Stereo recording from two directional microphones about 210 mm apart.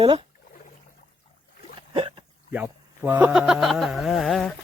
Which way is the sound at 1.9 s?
25° right (ahead or behind).